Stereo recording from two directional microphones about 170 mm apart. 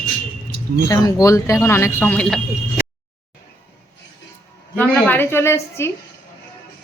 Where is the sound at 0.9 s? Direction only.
20° left (ahead or behind); by 2.4 s 5° left (ahead or behind).